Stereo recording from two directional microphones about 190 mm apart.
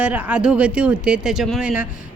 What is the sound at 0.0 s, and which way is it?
A woman's voice, 5° right (ahead or behind).